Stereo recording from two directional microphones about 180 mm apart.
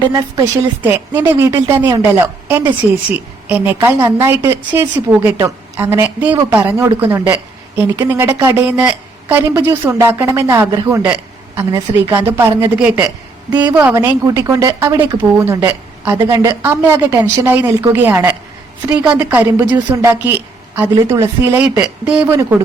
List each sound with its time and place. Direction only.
0.9 s a woman's voice: 10° right (ahead or behind)